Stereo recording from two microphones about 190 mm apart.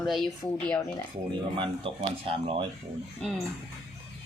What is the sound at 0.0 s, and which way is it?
Speech, centre (ahead or behind).